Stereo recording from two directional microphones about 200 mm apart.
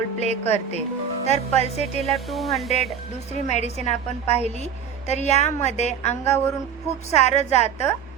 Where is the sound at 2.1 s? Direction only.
Centre (ahead or behind).